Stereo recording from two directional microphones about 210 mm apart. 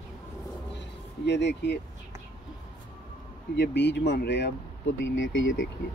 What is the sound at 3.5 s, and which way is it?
Speech, 55° left (ahead or behind).